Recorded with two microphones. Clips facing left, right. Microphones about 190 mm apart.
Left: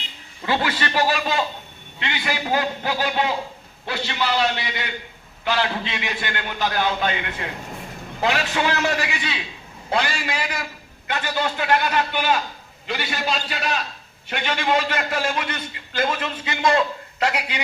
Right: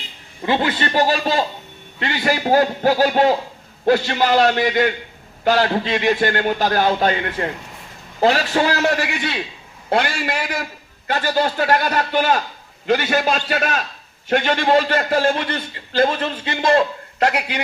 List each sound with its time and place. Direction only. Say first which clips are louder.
0.4 s a man's voice: right 4 dB; 20° right (ahead or behind); by 8.9 s 35° right (ahead or behind)
8.9 s a man's voice: right 4 dB; 60° right (ahead or behind)
11.0 s a man's voice: right 6 dB; 40° right (ahead or behind)
16.6 s a man's voice: right 3 dB; 50° right (ahead or behind)